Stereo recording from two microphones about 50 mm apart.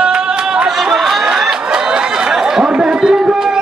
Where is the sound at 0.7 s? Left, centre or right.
Centre.